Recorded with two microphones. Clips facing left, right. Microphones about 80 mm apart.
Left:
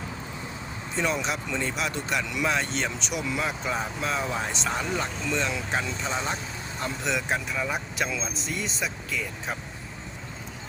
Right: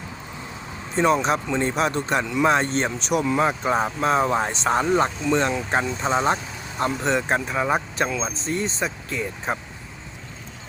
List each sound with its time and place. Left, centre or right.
0.9 s speech: right